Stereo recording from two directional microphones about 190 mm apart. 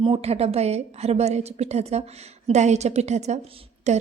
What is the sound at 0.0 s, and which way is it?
A woman's voice, 30° right (ahead or behind).